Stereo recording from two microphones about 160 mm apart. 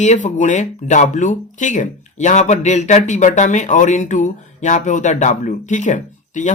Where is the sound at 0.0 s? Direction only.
50° left (ahead or behind).